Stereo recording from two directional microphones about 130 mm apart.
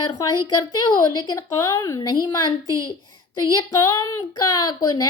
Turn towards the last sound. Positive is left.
turn(degrees=30)  # may be behind; listen again after turning